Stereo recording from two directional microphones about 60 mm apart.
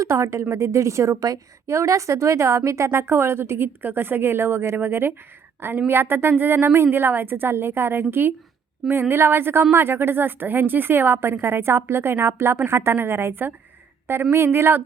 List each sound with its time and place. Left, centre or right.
0.1 s a woman's voice: right